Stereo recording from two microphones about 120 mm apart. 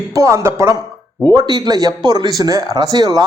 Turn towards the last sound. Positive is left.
turn(degrees=-30)  # may be behind; listen again after turning